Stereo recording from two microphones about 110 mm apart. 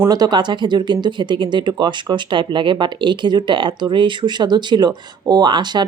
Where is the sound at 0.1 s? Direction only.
40° right (ahead or behind).